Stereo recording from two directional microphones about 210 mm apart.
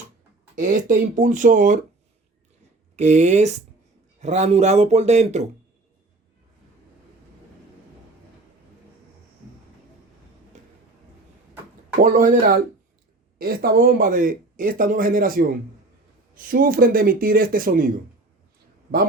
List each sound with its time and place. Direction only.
0.5 s speech: 40° right (ahead or behind)
2.9 s speech: 35° right (ahead or behind)
12.0 s speech: 40° right (ahead or behind)